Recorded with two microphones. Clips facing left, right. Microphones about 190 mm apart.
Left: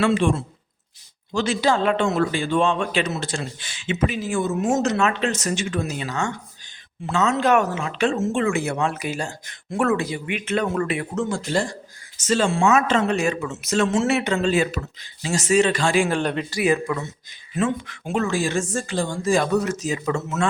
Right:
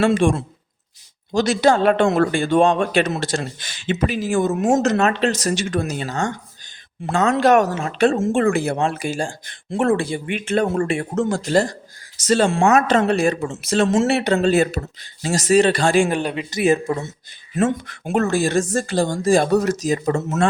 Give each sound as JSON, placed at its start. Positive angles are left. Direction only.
{"t": 0.0, "sound": "speech", "side_deg": -50}
{"t": 3.8, "sound": "speech", "side_deg": -40}
{"t": 7.1, "sound": "speech", "side_deg": -50}
{"t": 8.5, "sound": "speech", "side_deg": -30}
{"t": 11.1, "sound": "speech", "side_deg": -45}
{"t": 12.5, "sound": "speech", "side_deg": -50}
{"t": 13.1, "sound": "speech", "side_deg": -35}
{"t": 16.0, "sound": "speech", "side_deg": -10}
{"t": 16.5, "sound": "speech", "side_deg": -25}
{"t": 18.1, "sound": "speech", "side_deg": -45}